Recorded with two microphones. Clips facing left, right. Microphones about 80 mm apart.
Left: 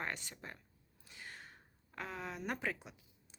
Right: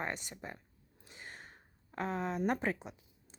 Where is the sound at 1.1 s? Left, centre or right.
Right.